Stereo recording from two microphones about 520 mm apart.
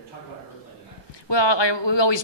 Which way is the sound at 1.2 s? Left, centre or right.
Left.